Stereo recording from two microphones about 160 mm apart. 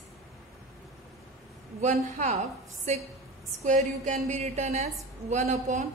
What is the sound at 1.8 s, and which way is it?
Speech, 50° right (ahead or behind).